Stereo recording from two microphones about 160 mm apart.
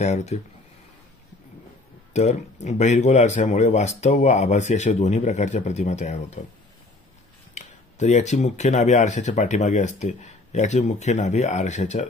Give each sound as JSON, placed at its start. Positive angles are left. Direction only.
{"t": 0.0, "sound": "speech", "side_deg": 45}
{"t": 2.1, "sound": "speech", "side_deg": 45}
{"t": 7.5, "sound": "speech", "side_deg": 45}